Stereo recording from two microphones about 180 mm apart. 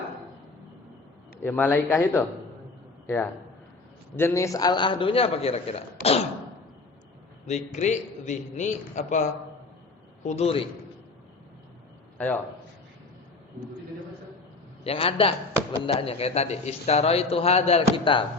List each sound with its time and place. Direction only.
1.4 s a man's voice: 10° left (ahead or behind)
4.1 s a man's voice: 15° left (ahead or behind); by 6.2 s 35° left (ahead or behind)
7.4 s a man's voice: 40° left (ahead or behind)
12.1 s a man's voice: 10° left (ahead or behind)
14.8 s a man's voice: 35° left (ahead or behind)